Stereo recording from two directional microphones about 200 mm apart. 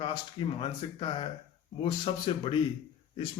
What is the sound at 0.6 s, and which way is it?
Speech, 25° left (ahead or behind).